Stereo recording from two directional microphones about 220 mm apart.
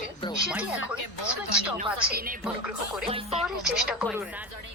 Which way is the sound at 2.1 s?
45° right (ahead or behind).